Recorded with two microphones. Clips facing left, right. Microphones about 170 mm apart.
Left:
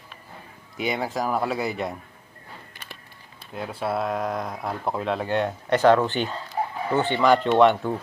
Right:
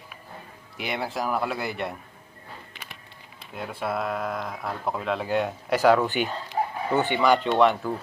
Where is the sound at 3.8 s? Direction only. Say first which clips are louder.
Left 2 dB; centre (ahead or behind).